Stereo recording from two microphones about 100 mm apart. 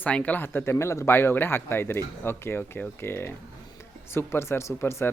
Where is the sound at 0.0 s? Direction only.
15° left (ahead or behind).